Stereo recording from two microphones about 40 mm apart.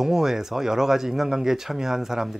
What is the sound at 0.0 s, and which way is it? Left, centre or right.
Speech, centre.